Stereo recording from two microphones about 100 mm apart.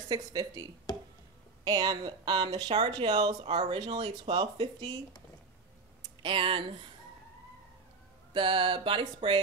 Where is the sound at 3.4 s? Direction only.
80° right.